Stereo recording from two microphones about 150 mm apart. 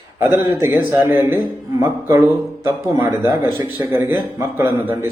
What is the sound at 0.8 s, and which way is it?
A man's voice, 15° right (ahead or behind).